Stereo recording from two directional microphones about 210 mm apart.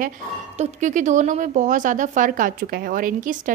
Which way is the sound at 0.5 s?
35° right (ahead or behind).